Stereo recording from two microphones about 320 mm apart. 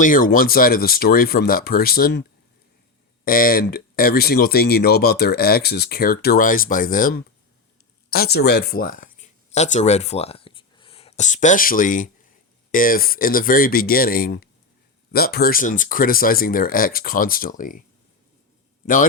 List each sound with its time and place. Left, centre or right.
0.0 s speech: left
3.2 s speech: left